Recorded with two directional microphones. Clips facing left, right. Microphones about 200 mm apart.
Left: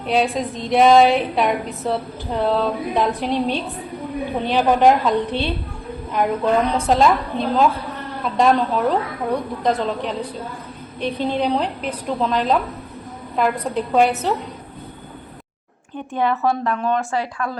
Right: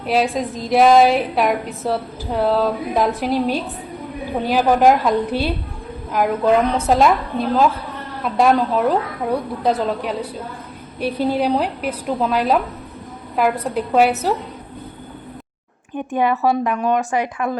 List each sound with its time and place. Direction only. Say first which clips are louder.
0.0 s a woman's voice: right 1 dB; 5° right (ahead or behind)
16.4 s a woman's voice: right 2 dB; 10° right (ahead or behind)